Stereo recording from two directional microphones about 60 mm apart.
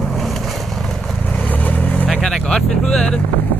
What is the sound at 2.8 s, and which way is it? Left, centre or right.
Speech, centre.